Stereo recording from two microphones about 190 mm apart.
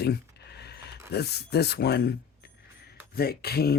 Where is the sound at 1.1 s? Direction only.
60° left (ahead or behind).